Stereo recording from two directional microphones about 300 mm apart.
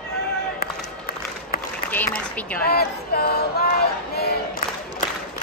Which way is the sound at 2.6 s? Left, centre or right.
Left.